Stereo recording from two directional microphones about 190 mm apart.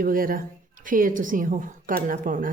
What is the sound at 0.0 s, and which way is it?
A woman's voice, 50° right (ahead or behind).